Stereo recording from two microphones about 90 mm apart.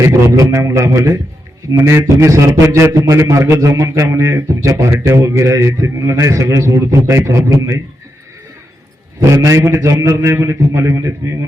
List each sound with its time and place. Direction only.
0.0 s a man's voice: 35° right (ahead or behind)
9.3 s a man's voice: 35° right (ahead or behind)